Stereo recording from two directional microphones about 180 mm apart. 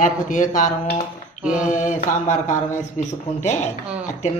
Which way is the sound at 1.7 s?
45° left (ahead or behind).